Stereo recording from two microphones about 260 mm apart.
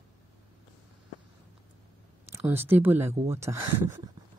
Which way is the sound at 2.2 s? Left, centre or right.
Centre.